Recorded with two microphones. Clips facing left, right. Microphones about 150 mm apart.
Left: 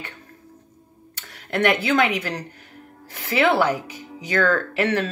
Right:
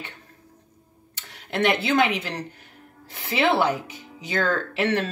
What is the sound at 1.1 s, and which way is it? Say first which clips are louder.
A woman's voice: left 2 dB; 20° right (ahead or behind).